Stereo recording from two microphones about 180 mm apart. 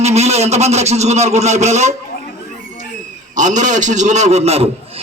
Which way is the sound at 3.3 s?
45° right (ahead or behind).